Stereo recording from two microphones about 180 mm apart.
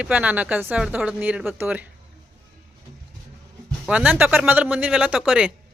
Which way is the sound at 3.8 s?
5° right (ahead or behind).